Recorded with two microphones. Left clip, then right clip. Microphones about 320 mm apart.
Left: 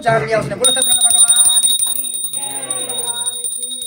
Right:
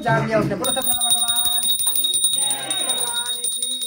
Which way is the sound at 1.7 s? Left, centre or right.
Centre.